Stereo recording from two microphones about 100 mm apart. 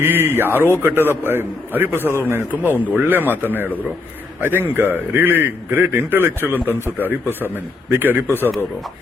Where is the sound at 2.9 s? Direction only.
20° right (ahead or behind).